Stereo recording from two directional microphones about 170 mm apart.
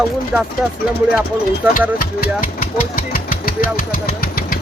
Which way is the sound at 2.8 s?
55° left (ahead or behind).